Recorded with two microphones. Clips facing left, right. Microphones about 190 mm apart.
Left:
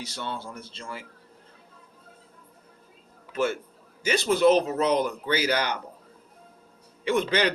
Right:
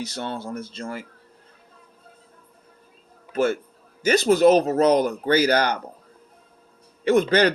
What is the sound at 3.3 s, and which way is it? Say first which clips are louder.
Speech: right 5 dB; 40° right (ahead or behind).